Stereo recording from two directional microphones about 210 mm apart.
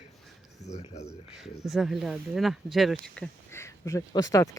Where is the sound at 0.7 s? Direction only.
30° left (ahead or behind).